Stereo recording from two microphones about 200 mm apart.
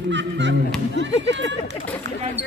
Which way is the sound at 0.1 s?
60° right (ahead or behind).